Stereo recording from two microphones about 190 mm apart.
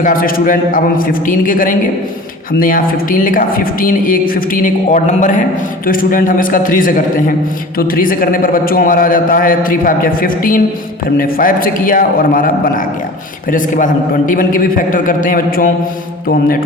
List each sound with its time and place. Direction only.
0.0 s speech: 45° left (ahead or behind)